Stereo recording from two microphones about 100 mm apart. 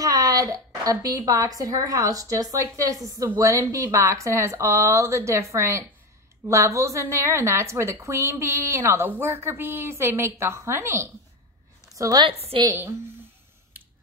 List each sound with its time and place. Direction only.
0.0 s a woman's voice: 35° right (ahead or behind)
12.5 s a woman's voice: 65° right (ahead or behind)